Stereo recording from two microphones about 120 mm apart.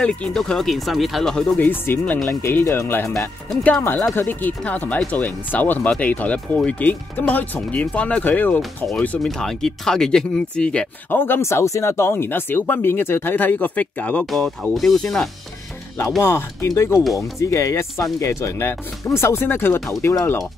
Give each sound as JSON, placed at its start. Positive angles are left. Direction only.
{"t": 0.0, "sound": "speech", "side_deg": 5}
{"t": 1.6, "sound": "speech", "side_deg": 15}
{"t": 16.2, "sound": "speech", "side_deg": 20}
{"t": 16.9, "sound": "speech", "side_deg": 0}
{"t": 17.4, "sound": "speech", "side_deg": 25}